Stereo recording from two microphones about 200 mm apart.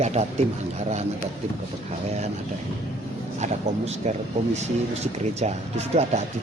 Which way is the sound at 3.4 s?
35° right (ahead or behind).